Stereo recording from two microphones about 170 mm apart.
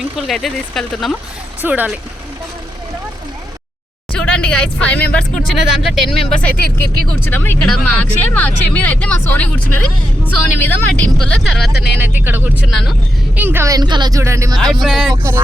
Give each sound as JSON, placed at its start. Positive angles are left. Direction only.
{"t": 0.0, "sound": "speech", "side_deg": 0}
{"t": 1.6, "sound": "speech", "side_deg": -10}
{"t": 4.1, "sound": "speech", "side_deg": 5}
{"t": 11.9, "sound": "speech", "side_deg": -10}
{"t": 14.8, "sound": "speech", "side_deg": 0}
{"t": 15.1, "sound": "speech", "side_deg": -15}